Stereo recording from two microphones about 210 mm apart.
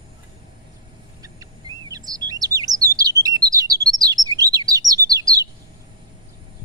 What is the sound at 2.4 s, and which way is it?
Chirp, 15° right (ahead or behind).